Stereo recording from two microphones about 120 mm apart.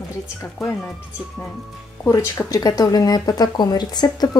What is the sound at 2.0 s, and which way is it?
Speech, 25° left (ahead or behind).